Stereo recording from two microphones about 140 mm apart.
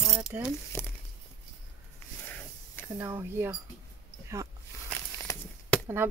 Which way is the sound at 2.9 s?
15° right (ahead or behind).